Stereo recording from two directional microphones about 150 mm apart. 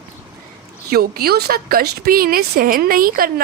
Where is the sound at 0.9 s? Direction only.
90° right.